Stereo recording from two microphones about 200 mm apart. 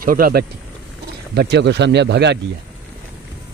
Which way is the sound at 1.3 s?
55° right (ahead or behind).